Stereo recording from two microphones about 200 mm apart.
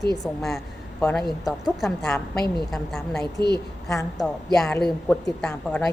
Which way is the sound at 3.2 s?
20° right (ahead or behind).